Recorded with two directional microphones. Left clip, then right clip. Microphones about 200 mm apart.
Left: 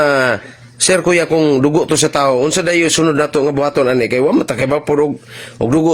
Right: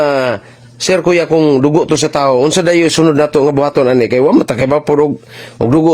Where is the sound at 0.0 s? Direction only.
15° right (ahead or behind).